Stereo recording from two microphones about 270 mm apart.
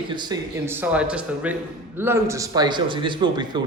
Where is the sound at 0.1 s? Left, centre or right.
Centre.